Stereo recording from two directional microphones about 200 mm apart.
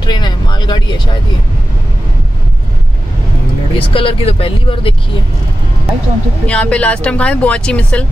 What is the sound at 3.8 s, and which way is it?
Speech, 25° left (ahead or behind).